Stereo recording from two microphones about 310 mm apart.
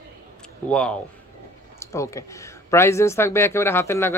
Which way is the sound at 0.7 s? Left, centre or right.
Centre.